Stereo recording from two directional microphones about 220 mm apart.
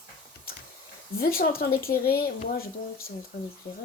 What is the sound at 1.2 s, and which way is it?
A child's voice, 40° left (ahead or behind).